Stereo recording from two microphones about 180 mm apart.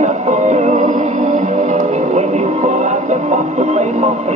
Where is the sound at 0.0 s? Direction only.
40° right (ahead or behind).